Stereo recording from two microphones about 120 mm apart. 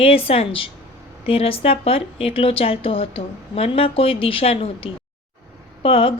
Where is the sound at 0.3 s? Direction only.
50° left (ahead or behind).